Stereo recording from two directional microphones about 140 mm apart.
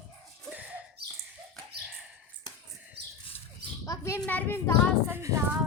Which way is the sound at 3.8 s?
25° left (ahead or behind).